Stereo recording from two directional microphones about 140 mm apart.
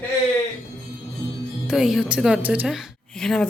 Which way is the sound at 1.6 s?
5° right (ahead or behind).